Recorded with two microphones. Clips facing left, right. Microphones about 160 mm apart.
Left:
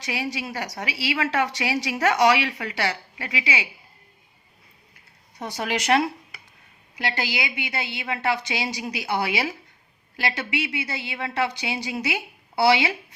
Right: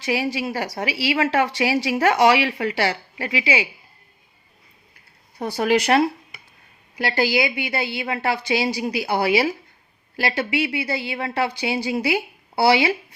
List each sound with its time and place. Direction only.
0.0 s a woman's voice: 30° right (ahead or behind)
5.4 s a woman's voice: 35° right (ahead or behind)